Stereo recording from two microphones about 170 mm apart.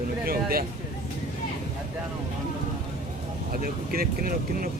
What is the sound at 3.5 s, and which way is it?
Speech, 60° right (ahead or behind).